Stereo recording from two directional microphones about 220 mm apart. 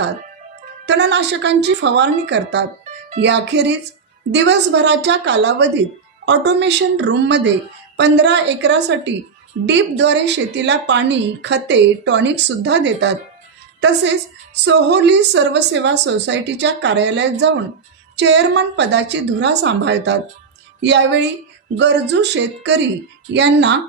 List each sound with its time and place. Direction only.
0.9 s a woman's voice: 50° right (ahead or behind)